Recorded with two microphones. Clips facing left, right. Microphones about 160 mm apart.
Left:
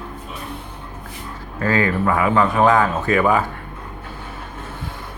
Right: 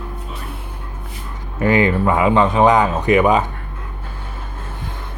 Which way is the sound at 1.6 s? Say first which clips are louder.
Right 4 dB; 20° right (ahead or behind).